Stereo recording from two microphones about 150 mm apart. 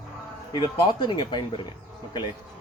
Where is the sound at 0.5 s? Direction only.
30° left (ahead or behind).